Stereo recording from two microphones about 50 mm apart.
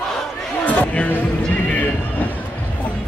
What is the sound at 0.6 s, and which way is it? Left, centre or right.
Music, left.